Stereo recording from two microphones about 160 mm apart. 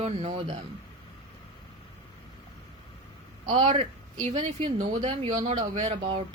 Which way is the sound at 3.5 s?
35° right (ahead or behind).